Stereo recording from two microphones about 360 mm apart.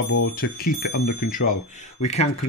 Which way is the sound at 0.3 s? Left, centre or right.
Left.